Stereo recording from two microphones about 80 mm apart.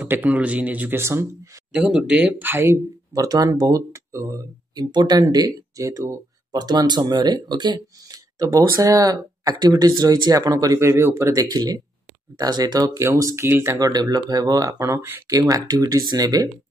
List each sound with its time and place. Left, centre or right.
0.0 s speech: right
1.7 s speech: centre
2.6 s speech: right
4.7 s speech: right
10.8 s speech: right
11.4 s speech: right
13.0 s speech: right
13.7 s speech: right
15.2 s speech: right